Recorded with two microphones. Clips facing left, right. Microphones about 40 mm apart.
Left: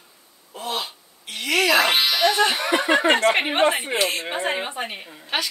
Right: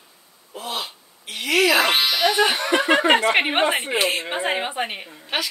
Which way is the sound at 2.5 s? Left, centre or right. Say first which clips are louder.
Right 1 dB; centre.